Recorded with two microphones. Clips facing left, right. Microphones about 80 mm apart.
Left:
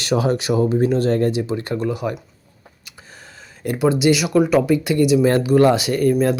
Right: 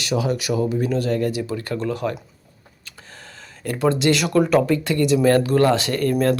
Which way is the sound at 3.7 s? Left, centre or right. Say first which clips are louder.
Left 2 dB; centre.